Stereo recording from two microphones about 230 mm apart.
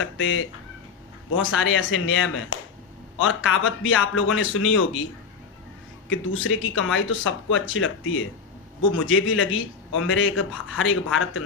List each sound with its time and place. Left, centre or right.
0.0 s a man's voice: left
6.1 s a man's voice: left